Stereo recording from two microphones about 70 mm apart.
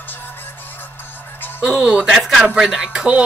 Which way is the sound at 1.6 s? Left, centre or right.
Centre.